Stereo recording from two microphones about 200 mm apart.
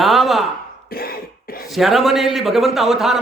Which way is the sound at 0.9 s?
50° left (ahead or behind).